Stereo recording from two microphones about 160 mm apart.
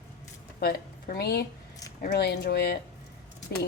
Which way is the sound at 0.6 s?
70° left (ahead or behind).